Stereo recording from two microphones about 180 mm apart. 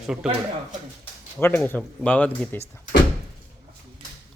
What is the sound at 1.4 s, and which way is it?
Speech, 10° left (ahead or behind).